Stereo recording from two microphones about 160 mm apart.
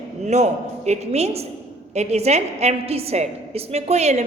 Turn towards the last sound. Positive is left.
turn(degrees=-45)  # may be behind; listen again after turning